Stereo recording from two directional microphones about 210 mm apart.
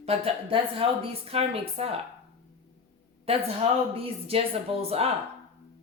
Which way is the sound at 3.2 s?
30° right (ahead or behind).